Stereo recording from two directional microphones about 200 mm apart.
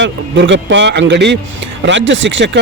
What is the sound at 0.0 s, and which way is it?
Speech, 65° right (ahead or behind).